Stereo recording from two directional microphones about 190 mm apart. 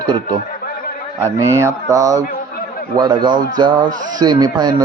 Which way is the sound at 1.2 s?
15° right (ahead or behind).